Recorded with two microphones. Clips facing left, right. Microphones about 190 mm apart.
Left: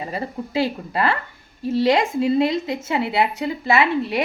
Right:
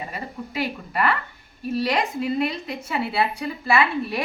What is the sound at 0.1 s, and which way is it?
A woman's voice, 30° left (ahead or behind).